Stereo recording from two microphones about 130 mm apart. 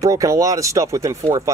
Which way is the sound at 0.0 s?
25° right (ahead or behind).